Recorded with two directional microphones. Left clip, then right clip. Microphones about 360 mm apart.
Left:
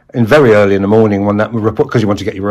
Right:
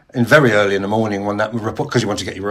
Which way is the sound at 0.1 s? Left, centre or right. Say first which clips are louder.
Left 5 dB; centre.